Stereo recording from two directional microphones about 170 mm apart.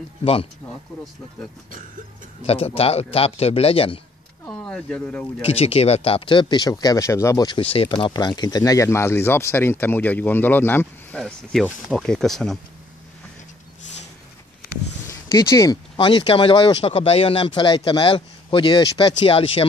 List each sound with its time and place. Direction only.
0.2 s a man's voice: 35° left (ahead or behind)
2.4 s a man's voice: 35° left (ahead or behind)
4.5 s speech: 5° left (ahead or behind)
5.4 s speech: 35° left (ahead or behind); by 12.5 s centre (ahead or behind)
15.3 s speech: 20° left (ahead or behind)